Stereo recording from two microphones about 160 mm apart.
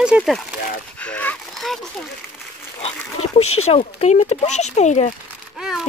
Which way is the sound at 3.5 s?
40° left (ahead or behind).